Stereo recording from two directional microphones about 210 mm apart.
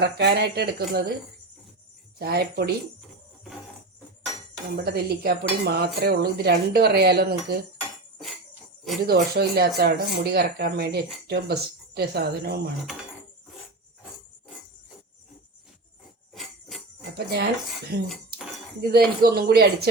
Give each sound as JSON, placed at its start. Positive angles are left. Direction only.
{"t": 0.0, "sound": "cutlery", "side_deg": -50}
{"t": 2.1, "sound": "cutlery", "side_deg": -50}
{"t": 4.8, "sound": "cutlery", "side_deg": -50}
{"t": 9.0, "sound": "cutlery", "side_deg": -50}
{"t": 16.3, "sound": "jingle bell", "side_deg": 0}
{"t": 17.2, "sound": "cutlery", "side_deg": -50}